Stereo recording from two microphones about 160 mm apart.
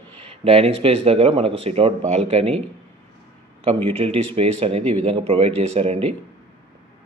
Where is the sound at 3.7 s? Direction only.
35° right (ahead or behind).